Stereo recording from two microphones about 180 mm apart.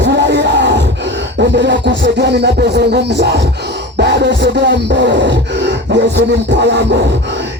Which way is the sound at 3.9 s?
70° right (ahead or behind).